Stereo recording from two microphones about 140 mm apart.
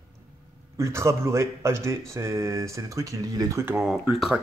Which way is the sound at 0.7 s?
20° right (ahead or behind).